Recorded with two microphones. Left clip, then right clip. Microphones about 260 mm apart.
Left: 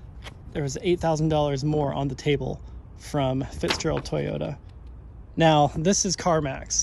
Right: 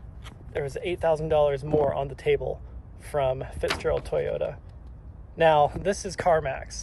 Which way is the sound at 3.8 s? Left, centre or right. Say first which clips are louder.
Right 1 dB; centre.